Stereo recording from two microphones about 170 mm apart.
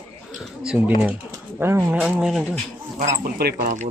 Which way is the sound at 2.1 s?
5° right (ahead or behind).